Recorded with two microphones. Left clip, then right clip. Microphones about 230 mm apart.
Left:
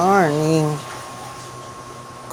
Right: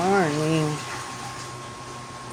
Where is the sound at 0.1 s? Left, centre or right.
Centre.